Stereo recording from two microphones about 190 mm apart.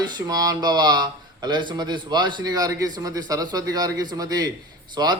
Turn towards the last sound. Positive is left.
turn(degrees=-25)  # may be behind; listen again after turning